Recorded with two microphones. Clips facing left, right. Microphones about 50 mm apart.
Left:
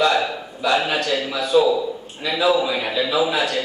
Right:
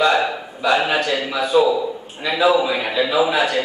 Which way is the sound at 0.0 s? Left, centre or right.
Centre.